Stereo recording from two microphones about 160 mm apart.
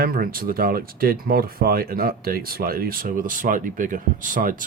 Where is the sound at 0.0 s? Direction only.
65° right (ahead or behind).